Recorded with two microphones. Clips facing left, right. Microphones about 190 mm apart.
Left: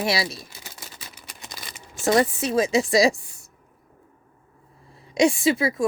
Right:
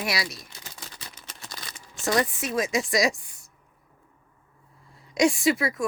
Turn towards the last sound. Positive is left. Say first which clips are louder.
# left 3 dB
turn(degrees=25)  # may be behind; listen again after turning